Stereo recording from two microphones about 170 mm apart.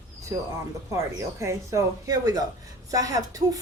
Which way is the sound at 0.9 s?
15° right (ahead or behind).